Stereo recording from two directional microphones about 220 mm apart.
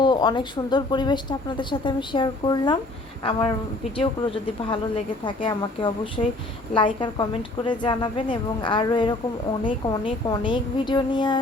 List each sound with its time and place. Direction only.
0.0 s speech: 20° left (ahead or behind)